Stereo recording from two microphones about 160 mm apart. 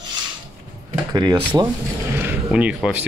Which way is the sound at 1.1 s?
25° right (ahead or behind).